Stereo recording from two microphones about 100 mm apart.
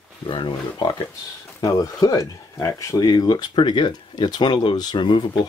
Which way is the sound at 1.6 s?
40° left (ahead or behind).